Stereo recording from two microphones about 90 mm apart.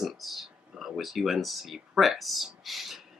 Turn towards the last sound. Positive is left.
turn(degrees=0)  # may be behind; listen again after turning